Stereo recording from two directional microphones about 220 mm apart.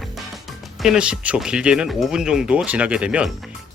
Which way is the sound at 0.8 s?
5° right (ahead or behind).